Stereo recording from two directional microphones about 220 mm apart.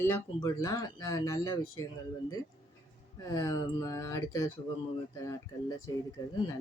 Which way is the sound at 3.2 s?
15° left (ahead or behind).